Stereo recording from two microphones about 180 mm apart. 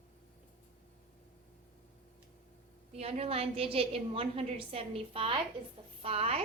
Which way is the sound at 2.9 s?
35° right (ahead or behind).